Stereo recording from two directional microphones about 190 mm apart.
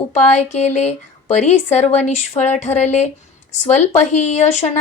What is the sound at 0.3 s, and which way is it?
Speech, 35° left (ahead or behind).